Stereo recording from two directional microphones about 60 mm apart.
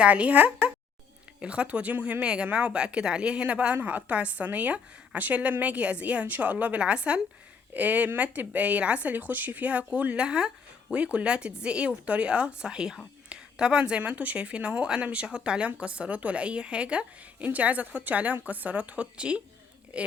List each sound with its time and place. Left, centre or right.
0.0 s a woman's voice: right